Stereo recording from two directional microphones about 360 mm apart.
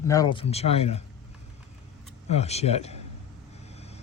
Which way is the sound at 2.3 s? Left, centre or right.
Centre.